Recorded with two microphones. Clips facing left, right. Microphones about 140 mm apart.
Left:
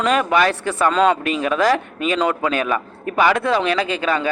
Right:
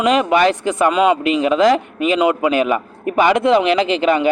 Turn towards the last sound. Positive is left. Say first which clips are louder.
# right 5 dB
turn(degrees=-20)  # may be behind; listen again after turning